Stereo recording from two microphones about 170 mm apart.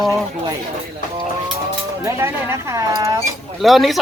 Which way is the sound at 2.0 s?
15° right (ahead or behind).